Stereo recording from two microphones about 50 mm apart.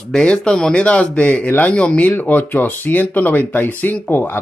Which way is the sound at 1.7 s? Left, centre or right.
Left.